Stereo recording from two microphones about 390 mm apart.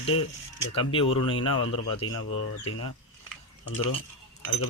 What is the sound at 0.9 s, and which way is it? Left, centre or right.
Speech, centre.